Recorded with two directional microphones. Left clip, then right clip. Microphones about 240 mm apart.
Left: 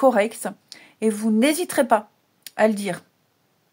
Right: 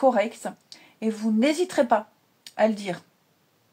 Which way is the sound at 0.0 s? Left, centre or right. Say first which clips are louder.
Left 3 dB; left.